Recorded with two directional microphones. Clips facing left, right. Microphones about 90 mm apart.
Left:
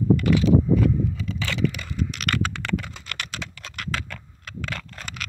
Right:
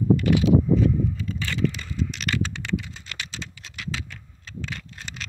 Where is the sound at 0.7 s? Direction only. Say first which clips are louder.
Even; 75° left (ahead or behind).